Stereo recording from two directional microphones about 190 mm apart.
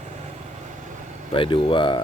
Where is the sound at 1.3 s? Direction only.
25° left (ahead or behind).